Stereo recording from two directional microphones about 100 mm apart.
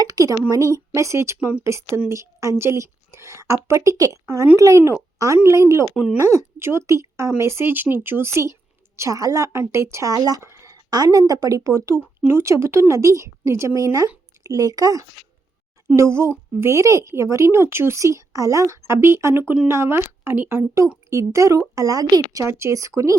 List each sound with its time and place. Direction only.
0.0 s a woman's voice: 40° right (ahead or behind)
16.0 s speech: 25° right (ahead or behind)